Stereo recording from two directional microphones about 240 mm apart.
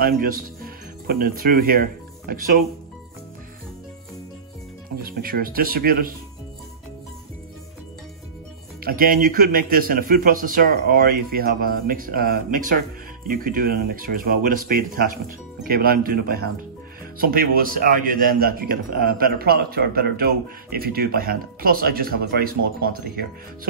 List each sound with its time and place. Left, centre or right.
0.0 s a man's voice: right
5.0 s a man's voice: right
8.8 s a man's voice: right